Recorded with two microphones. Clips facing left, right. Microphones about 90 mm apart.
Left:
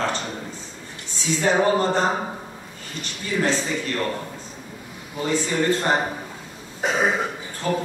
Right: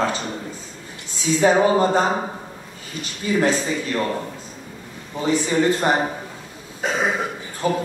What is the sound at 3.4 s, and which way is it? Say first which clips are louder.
Speech: right 2 dB; 15° right (ahead or behind).